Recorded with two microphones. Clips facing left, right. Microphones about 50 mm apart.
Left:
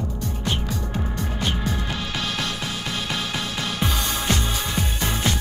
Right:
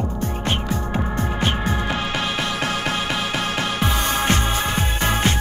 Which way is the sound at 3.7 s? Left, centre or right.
Right.